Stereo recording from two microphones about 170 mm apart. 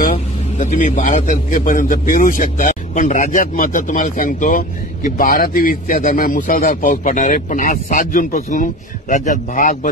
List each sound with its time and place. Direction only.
0.1 s a man's voice: 40° left (ahead or behind)